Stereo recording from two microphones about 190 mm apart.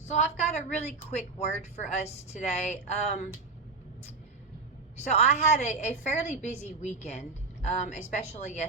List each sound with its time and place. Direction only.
0.0 s a woman's voice: 35° left (ahead or behind)
4.9 s a woman's voice: 35° left (ahead or behind)